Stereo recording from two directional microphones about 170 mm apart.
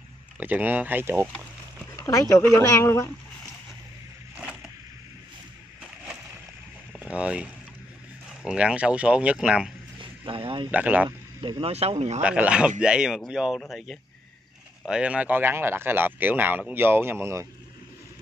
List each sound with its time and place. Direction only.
0.4 s speech: 10° right (ahead or behind)
2.0 s speech: 20° left (ahead or behind)
7.2 s speech: 5° right (ahead or behind)
9.9 s vehicle: 30° right (ahead or behind)
10.7 s speech: 10° right (ahead or behind)
11.1 s speech: 25° right (ahead or behind)
12.2 s speech: 5° right (ahead or behind)